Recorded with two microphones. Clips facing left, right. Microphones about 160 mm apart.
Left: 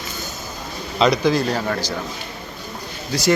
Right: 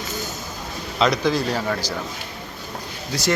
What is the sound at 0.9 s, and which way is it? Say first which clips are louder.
Speech: left 3 dB; centre (ahead or behind).